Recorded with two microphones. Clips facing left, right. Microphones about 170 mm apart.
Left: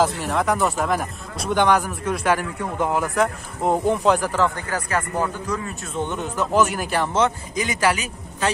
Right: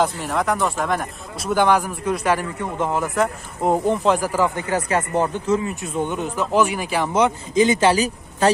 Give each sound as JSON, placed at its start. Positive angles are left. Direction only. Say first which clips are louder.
{"t": 0.0, "sound": "speech", "louder": "even", "side_deg": 0}
{"t": 4.6, "sound": "speech", "louder": "right 4 dB", "side_deg": -25}
{"t": 7.5, "sound": "a man's voice", "louder": "right 6 dB", "side_deg": -25}